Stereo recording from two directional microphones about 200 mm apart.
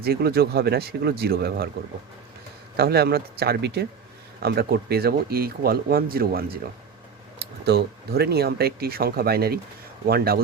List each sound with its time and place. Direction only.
0.0 s speech: 50° right (ahead or behind)
2.7 s speech: 50° right (ahead or behind)
7.6 s speech: 55° right (ahead or behind)